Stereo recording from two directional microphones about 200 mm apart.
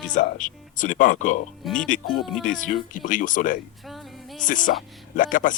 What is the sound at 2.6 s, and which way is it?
Speech, 40° left (ahead or behind).